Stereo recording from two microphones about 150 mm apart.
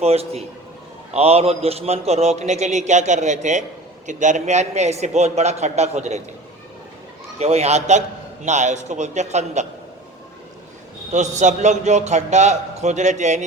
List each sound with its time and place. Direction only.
0.0 s a man's voice: 45° right (ahead or behind)
7.3 s a man's voice: 45° right (ahead or behind)
11.1 s a man's voice: 55° right (ahead or behind)